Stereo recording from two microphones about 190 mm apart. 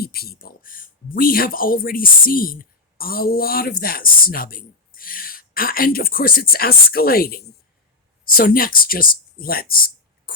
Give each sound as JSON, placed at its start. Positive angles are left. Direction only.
{"t": 0.0, "sound": "speech", "side_deg": 55}